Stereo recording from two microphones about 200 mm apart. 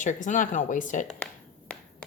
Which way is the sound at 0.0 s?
40° left (ahead or behind).